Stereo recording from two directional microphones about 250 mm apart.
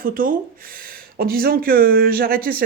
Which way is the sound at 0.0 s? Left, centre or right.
Right.